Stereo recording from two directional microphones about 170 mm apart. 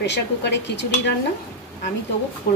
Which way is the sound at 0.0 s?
90° left.